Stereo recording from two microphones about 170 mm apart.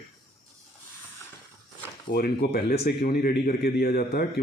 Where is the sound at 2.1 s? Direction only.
65° left (ahead or behind).